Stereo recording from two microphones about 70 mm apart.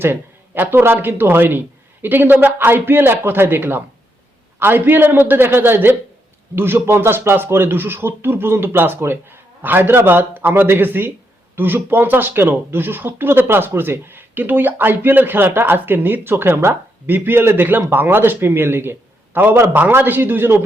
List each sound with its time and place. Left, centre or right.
0.0 s speech: right